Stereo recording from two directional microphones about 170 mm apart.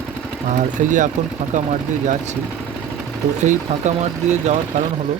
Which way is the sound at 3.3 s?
45° right (ahead or behind).